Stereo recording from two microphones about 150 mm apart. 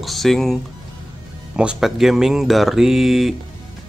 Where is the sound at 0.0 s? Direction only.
Centre (ahead or behind).